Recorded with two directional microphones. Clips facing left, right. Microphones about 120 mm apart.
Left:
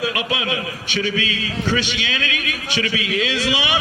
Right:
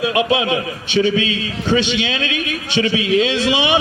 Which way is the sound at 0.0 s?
25° right (ahead or behind).